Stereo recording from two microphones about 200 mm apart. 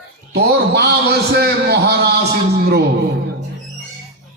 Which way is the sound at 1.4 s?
55° right (ahead or behind).